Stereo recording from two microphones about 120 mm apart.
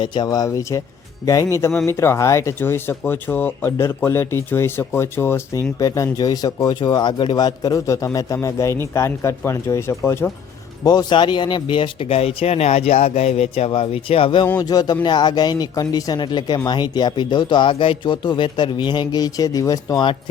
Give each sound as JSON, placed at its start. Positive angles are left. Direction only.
{"t": 0.0, "sound": "speech", "side_deg": 40}
{"t": 10.8, "sound": "speech", "side_deg": 40}
{"t": 14.6, "sound": "speech", "side_deg": 30}